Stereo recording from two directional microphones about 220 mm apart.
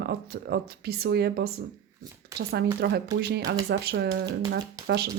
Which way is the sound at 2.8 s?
45° right (ahead or behind).